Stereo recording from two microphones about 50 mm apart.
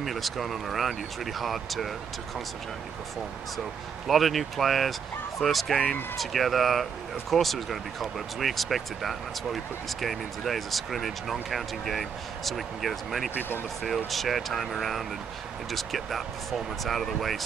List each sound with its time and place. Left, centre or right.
0.0 s speech: centre
4.1 s speech: centre
13.3 s speech: left
13.8 s speech: centre